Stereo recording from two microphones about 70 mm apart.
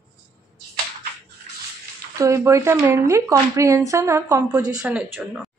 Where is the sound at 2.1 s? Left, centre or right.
Right.